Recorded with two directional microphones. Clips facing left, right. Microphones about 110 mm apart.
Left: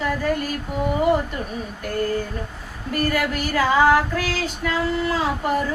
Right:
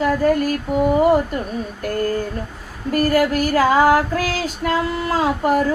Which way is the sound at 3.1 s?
40° right (ahead or behind).